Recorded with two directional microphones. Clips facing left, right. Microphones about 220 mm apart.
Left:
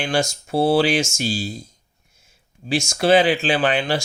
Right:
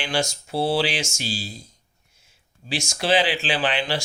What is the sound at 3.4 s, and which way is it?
Speech, 45° left (ahead or behind).